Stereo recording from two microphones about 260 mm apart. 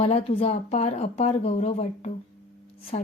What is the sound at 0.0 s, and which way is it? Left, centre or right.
A woman's voice, left.